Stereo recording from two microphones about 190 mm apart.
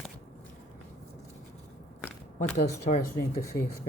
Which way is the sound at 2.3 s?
35° left (ahead or behind).